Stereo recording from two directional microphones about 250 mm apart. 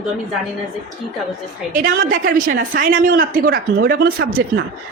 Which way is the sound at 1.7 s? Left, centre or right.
Right.